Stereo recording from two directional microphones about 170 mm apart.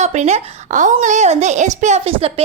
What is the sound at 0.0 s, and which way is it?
Speech, 40° right (ahead or behind).